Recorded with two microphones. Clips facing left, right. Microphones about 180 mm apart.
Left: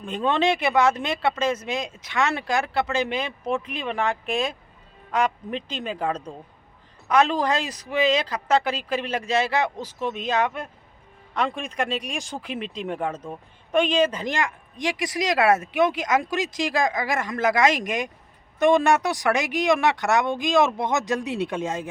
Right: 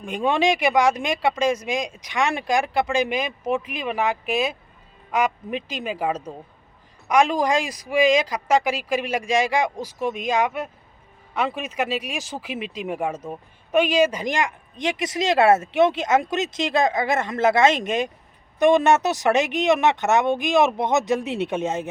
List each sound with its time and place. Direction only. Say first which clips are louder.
0.0 s speech: right 1 dB; 10° right (ahead or behind)